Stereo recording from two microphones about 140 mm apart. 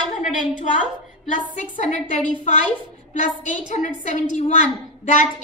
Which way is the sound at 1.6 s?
60° left (ahead or behind).